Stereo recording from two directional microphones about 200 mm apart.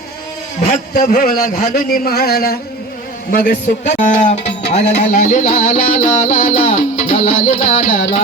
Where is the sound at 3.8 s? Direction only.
35° left (ahead or behind).